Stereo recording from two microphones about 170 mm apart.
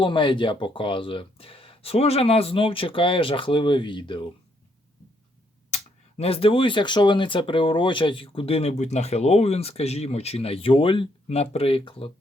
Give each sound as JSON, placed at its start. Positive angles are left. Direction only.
{"t": 0.0, "sound": "speech", "side_deg": 30}
{"t": 5.7, "sound": "speech", "side_deg": 35}